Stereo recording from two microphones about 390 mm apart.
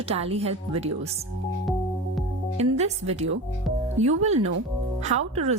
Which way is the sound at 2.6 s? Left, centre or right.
Centre.